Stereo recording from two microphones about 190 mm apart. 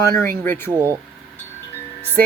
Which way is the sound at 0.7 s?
15° right (ahead or behind).